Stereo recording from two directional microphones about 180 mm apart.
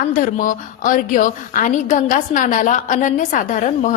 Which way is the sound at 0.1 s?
50° left (ahead or behind).